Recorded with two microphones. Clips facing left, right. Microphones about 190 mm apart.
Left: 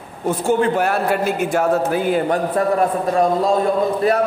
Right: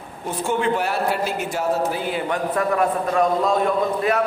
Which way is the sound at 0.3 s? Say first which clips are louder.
Left 5 dB; 45° left (ahead or behind).